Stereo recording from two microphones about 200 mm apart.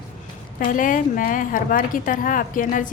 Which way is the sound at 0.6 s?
40° left (ahead or behind).